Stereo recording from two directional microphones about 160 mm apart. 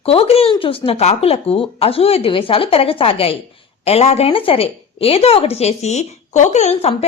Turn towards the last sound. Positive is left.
turn(degrees=40)  # may be behind; listen again after turning